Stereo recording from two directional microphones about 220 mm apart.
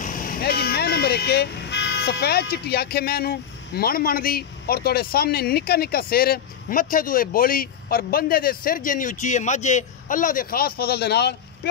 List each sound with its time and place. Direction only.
0.0 s speech: 40° left (ahead or behind)